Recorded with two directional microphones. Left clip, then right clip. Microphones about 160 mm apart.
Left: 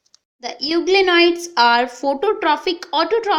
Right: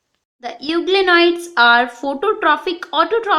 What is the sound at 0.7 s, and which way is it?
A woman's voice, 10° left (ahead or behind).